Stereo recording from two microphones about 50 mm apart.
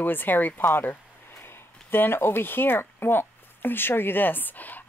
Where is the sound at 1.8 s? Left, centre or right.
Left.